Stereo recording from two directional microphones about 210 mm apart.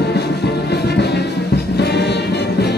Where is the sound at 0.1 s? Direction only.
50° left (ahead or behind).